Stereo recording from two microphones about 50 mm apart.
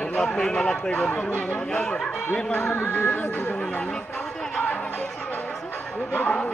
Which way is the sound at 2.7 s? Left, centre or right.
Left.